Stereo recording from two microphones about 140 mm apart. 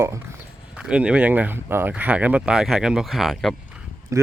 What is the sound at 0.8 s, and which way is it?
Speech, 5° right (ahead or behind).